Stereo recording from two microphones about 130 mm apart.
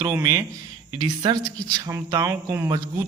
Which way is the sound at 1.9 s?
20° right (ahead or behind).